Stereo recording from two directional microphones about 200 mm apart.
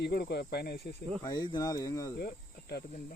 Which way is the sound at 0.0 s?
55° left (ahead or behind).